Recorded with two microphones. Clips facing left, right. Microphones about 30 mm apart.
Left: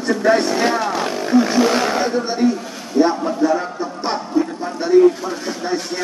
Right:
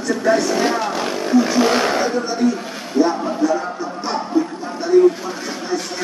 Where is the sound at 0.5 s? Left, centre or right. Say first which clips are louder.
Left 1 dB; centre.